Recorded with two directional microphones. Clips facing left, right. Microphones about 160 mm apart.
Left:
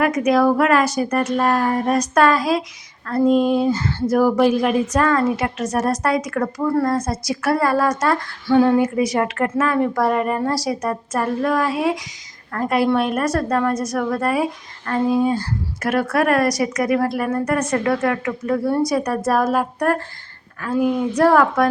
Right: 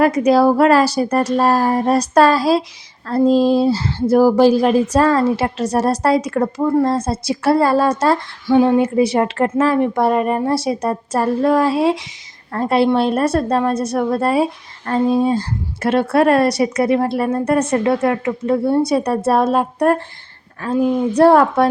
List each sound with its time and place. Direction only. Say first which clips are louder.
0.0 s a woman's voice: right 4 dB; 30° right (ahead or behind)
8.4 s a woman's voice: right 2 dB; 20° right (ahead or behind)